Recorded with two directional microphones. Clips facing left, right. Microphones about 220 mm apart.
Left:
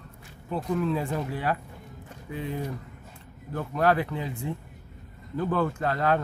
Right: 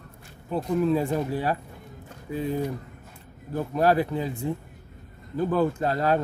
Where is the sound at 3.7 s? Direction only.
35° right (ahead or behind).